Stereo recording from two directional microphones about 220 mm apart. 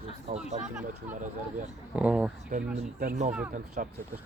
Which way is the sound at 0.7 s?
5° right (ahead or behind).